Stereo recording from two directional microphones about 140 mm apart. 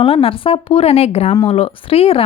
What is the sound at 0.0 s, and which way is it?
A woman's voice, 40° left (ahead or behind).